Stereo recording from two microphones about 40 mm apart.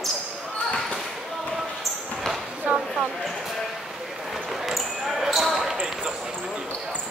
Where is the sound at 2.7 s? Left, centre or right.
Right.